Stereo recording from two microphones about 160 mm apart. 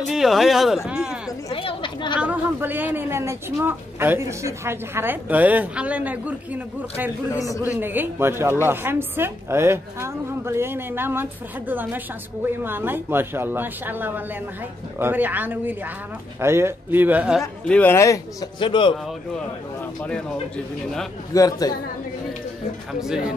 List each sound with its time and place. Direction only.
0.1 s a man's voice: centre (ahead or behind)
1.5 s a woman's voice: 35° left (ahead or behind)
2.1 s speech: 10° right (ahead or behind)
7.3 s a man's voice: 20° left (ahead or behind)
7.6 s speech: 10° right (ahead or behind)
17.6 s a man's voice: 10° left (ahead or behind)
18.6 s a woman's voice: 30° left (ahead or behind)
20.0 s speech: 5° left (ahead or behind)
21.3 s a man's voice: 25° left (ahead or behind)
22.9 s speech: 5° right (ahead or behind)